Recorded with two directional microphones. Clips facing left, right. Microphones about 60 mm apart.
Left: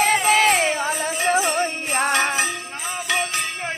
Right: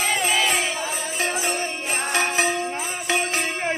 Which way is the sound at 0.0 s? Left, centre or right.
Left.